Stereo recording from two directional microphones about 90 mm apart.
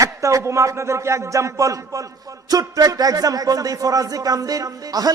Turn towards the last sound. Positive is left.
turn(degrees=-40)  # may be behind; listen again after turning